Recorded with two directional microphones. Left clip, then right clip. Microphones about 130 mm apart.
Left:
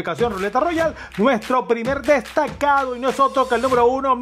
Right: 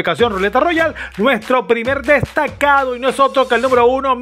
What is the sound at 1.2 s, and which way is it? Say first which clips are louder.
Speech: right 4 dB; centre (ahead or behind).